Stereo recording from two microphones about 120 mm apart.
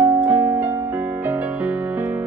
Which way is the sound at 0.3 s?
15° right (ahead or behind).